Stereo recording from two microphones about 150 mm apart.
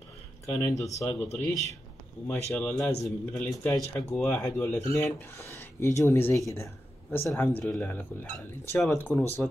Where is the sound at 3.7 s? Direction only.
10° left (ahead or behind).